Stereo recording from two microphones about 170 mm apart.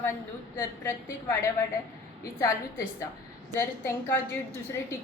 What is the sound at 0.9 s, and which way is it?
Speech, 15° left (ahead or behind).